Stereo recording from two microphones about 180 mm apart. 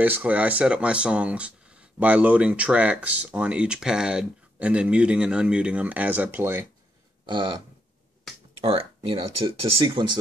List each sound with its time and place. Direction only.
0.0 s speech: 10° right (ahead or behind)
7.2 s a sound: 25° right (ahead or behind)
8.6 s speech: 30° right (ahead or behind)